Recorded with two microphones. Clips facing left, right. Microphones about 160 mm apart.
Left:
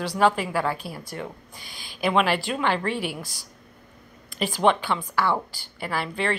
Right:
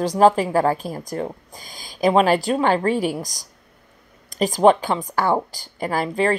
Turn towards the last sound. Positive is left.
turn(degrees=-40)  # may be behind; listen again after turning